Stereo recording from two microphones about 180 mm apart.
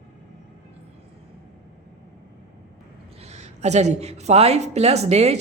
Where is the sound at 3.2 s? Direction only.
40° right (ahead or behind).